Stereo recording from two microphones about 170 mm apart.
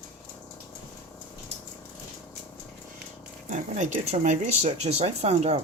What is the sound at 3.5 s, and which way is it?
Speech, 45° right (ahead or behind).